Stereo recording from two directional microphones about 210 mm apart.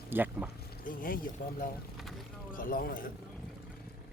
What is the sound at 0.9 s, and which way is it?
Speech, 40° left (ahead or behind).